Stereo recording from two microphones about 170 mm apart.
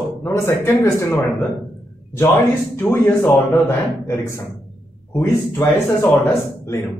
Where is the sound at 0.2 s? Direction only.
15° left (ahead or behind).